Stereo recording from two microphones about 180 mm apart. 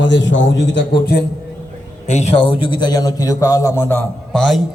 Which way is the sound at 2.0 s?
40° left (ahead or behind).